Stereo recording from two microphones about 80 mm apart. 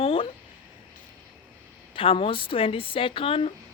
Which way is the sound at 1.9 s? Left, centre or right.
Left.